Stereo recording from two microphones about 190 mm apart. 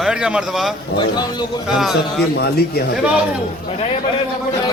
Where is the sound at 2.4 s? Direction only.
55° left (ahead or behind).